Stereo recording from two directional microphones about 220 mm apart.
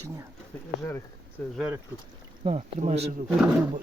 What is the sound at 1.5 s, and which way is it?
Speech, 5° right (ahead or behind).